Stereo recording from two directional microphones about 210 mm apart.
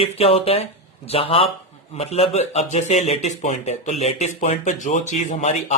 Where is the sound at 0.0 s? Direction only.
30° left (ahead or behind).